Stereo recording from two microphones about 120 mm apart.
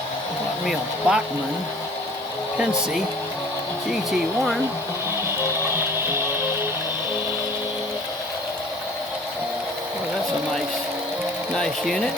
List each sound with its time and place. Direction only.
0.6 s speech: 5° right (ahead or behind)
5.4 s music: 20° right (ahead or behind)
11.5 s speech: 5° left (ahead or behind)